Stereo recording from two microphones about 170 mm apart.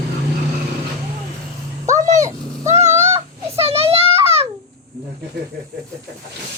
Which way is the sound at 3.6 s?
35° right (ahead or behind).